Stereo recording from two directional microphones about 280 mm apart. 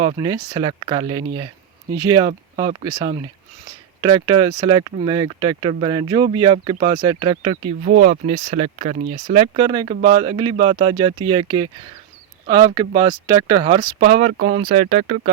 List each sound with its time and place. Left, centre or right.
0.0 s speech: centre
7.9 s speech: right